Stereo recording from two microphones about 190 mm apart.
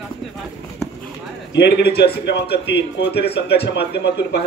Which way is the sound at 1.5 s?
60° left (ahead or behind).